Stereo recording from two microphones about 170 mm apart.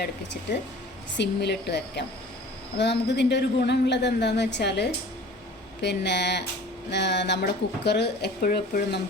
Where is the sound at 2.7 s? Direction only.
90° left.